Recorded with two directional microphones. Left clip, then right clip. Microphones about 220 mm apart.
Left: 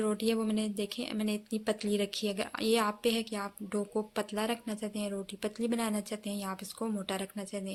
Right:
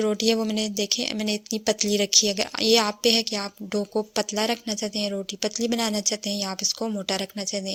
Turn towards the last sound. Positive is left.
turn(degrees=-30)  # may be behind; listen again after turning